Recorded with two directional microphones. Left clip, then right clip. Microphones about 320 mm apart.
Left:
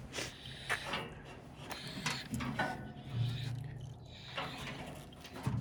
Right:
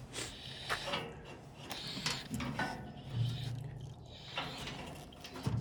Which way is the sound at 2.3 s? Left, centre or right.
Left.